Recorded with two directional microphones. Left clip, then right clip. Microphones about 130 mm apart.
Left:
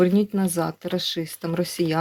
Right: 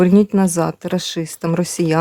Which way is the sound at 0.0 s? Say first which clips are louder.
Right 7 dB; 55° right (ahead or behind).